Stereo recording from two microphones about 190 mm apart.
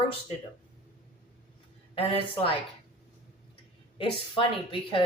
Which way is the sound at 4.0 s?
25° left (ahead or behind).